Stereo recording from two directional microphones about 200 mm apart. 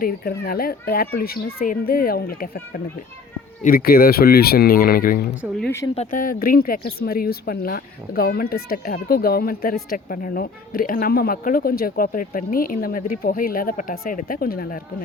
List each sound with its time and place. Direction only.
0.0 s a woman's voice: 50° left (ahead or behind)